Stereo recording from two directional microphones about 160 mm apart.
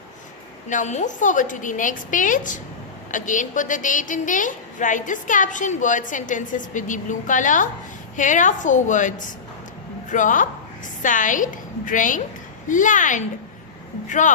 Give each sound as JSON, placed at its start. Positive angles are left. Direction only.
{"t": 0.7, "sound": "a woman's voice", "side_deg": 50}